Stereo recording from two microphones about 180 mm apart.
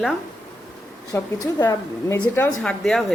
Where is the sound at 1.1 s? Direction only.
15° left (ahead or behind).